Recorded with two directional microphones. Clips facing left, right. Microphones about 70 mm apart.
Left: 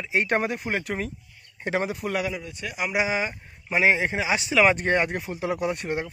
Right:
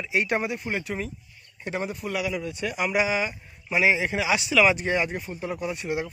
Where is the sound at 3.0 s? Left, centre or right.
Left.